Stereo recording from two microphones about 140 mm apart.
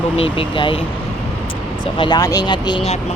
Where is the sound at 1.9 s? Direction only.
30° left (ahead or behind).